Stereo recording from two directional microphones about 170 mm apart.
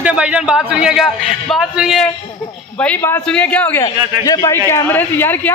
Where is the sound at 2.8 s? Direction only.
10° left (ahead or behind).